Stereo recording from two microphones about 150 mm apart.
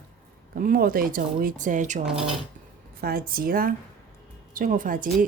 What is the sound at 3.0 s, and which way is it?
Speech, 85° right.